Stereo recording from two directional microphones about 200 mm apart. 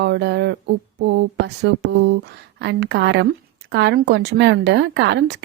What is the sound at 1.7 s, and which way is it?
A woman's voice, 65° right (ahead or behind).